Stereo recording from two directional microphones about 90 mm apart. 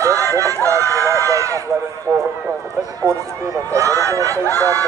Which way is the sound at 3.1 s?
35° right (ahead or behind).